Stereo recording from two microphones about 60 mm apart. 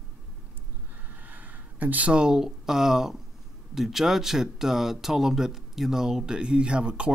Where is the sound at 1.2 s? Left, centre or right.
Right.